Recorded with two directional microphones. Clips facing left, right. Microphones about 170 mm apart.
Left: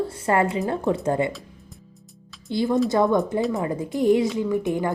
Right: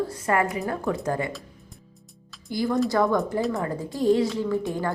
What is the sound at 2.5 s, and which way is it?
A woman's voice, 25° left (ahead or behind).